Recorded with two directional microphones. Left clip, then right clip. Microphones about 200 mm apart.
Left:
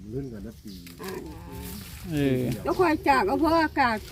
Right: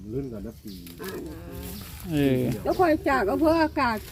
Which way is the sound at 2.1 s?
5° right (ahead or behind).